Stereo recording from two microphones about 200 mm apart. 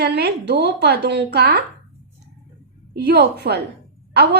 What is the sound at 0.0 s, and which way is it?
A woman's voice, 55° right (ahead or behind).